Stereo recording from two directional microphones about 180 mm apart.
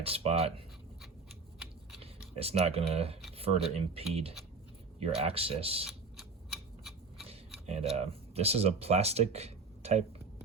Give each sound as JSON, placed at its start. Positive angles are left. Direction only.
{"t": 0.0, "sound": "speech", "side_deg": -35}
{"t": 2.3, "sound": "speech", "side_deg": -35}
{"t": 6.1, "sound": "tick-tock", "side_deg": 0}
{"t": 7.3, "sound": "speech", "side_deg": -35}